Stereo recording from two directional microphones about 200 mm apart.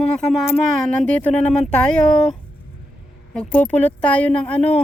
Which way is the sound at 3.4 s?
10° left (ahead or behind).